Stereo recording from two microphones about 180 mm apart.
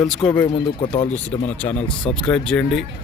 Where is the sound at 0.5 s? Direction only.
30° left (ahead or behind).